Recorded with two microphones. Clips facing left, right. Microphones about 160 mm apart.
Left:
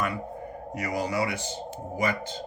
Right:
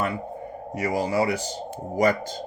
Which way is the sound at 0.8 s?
30° right (ahead or behind).